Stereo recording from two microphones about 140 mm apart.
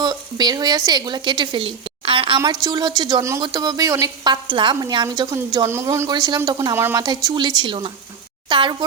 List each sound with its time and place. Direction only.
0.0 s speech: 30° right (ahead or behind)
2.4 s a woman's voice: 25° right (ahead or behind)